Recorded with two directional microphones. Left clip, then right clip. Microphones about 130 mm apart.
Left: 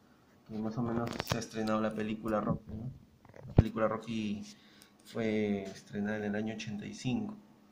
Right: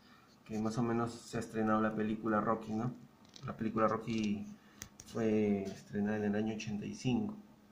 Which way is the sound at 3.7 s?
10° left (ahead or behind).